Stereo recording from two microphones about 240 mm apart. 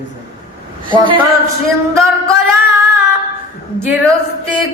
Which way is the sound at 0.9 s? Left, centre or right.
Centre.